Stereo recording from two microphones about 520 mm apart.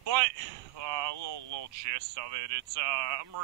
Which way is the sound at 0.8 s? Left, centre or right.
Right.